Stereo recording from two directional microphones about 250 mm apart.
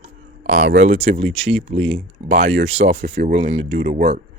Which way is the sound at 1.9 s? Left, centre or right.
Right.